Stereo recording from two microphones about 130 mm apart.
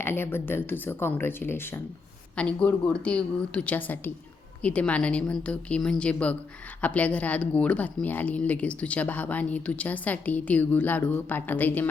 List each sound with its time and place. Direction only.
0.0 s speech: 20° left (ahead or behind)